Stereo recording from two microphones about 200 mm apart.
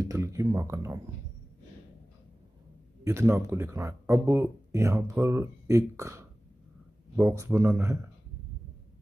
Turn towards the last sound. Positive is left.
turn(degrees=-15)  # may be behind; listen again after turning